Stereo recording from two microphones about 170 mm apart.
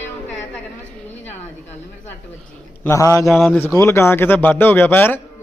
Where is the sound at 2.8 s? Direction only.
15° left (ahead or behind).